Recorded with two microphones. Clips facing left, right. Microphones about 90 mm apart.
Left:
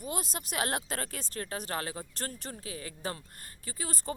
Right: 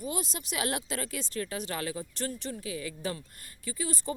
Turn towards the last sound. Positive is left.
turn(degrees=40)  # may be behind; listen again after turning